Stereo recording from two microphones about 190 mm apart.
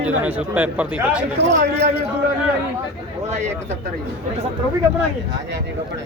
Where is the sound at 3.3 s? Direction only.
35° right (ahead or behind).